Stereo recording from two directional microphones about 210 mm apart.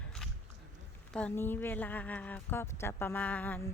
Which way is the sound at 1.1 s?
10° left (ahead or behind).